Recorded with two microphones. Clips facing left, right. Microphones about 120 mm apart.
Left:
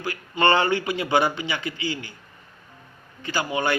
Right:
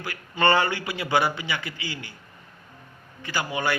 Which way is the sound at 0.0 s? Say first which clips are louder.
Left 2 dB; 20° left (ahead or behind).